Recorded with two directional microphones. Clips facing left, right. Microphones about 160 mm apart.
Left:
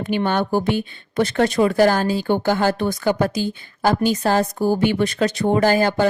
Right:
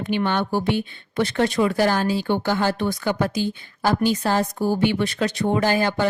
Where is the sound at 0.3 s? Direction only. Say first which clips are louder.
Left 4 dB; 45° left (ahead or behind).